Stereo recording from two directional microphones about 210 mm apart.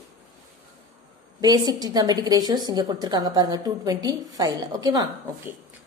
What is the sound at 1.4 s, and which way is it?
A woman's voice, 20° right (ahead or behind).